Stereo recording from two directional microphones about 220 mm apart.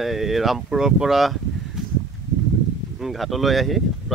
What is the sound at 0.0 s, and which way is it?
Speech, centre (ahead or behind).